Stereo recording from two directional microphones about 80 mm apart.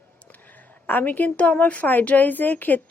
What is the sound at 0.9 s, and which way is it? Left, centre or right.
Speech, left.